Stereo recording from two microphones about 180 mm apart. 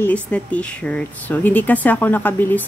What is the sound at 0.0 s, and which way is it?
Speech, 5° left (ahead or behind).